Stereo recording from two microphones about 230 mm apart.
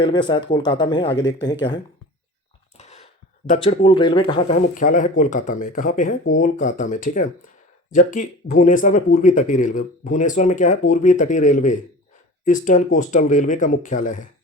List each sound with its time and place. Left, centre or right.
0.0 s speech: centre
2.7 s a sound: left
3.5 s speech: left